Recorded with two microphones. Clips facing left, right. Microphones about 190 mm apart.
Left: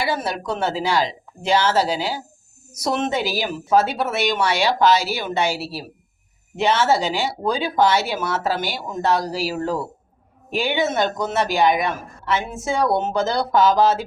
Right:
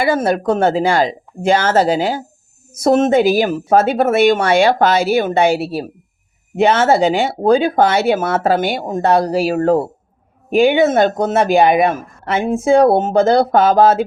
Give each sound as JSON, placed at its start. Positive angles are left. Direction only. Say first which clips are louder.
{"t": 0.0, "sound": "a woman's voice", "louder": "right 9 dB", "side_deg": -50}